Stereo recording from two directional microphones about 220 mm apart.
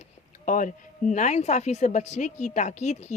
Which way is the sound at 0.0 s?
35° left (ahead or behind).